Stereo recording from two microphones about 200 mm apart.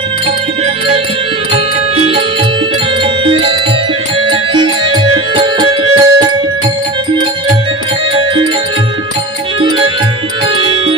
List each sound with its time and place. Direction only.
1.5 s music: 25° right (ahead or behind)
9.6 s music: 25° right (ahead or behind)